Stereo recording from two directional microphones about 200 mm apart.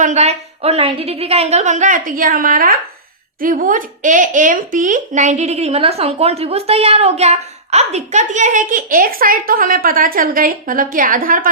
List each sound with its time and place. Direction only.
0.0 s speech: 35° right (ahead or behind)